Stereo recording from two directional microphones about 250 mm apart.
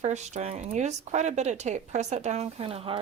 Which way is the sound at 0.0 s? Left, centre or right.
Right.